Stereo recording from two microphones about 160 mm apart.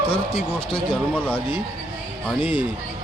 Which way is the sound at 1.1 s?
10° left (ahead or behind).